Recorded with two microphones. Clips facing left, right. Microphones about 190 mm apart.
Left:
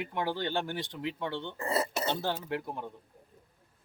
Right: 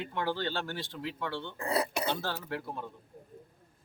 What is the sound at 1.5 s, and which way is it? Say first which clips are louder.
Speech: right 1 dB; centre (ahead or behind).